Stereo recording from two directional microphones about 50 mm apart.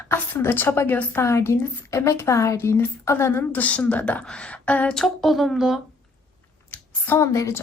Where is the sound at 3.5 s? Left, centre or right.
Left.